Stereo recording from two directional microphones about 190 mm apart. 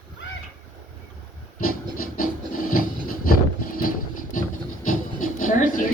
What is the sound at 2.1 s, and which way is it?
Printer, 45° left (ahead or behind).